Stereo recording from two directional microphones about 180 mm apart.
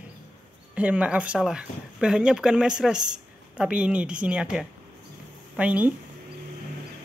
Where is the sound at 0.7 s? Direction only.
5° right (ahead or behind).